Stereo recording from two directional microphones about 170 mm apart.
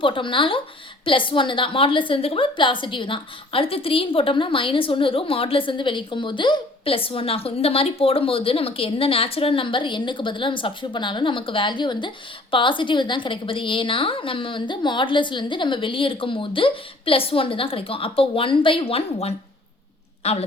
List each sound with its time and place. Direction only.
0.0 s a woman's voice: 30° left (ahead or behind)